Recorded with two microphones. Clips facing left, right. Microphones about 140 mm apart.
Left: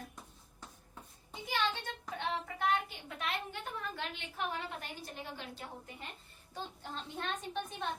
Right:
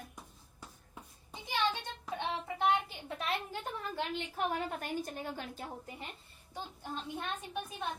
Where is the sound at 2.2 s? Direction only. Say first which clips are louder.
Right 2 dB; 20° right (ahead or behind).